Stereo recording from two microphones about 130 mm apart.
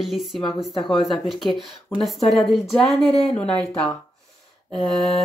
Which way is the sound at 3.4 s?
5° left (ahead or behind).